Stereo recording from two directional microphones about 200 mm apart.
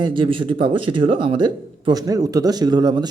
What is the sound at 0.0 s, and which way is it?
Speech, 25° right (ahead or behind).